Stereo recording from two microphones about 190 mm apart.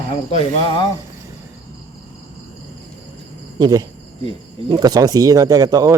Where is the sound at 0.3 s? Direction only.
25° left (ahead or behind).